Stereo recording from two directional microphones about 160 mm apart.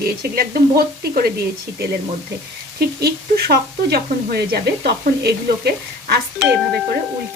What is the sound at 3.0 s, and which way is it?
Speech, 75° right (ahead or behind).